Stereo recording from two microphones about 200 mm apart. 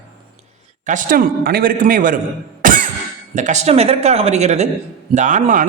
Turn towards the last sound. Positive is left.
turn(degrees=-40)  # may be behind; listen again after turning